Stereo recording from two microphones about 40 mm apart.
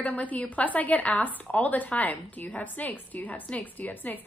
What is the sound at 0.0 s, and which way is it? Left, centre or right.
A woman's voice, left.